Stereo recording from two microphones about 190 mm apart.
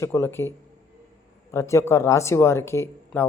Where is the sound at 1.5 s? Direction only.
15° left (ahead or behind).